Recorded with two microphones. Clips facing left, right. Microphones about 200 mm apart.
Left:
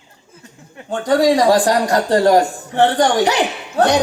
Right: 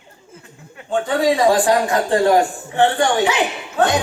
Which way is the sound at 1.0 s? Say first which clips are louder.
Left 4 dB; 40° left (ahead or behind).